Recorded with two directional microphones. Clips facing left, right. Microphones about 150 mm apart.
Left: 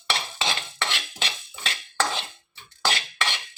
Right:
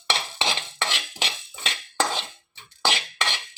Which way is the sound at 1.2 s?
20° right (ahead or behind).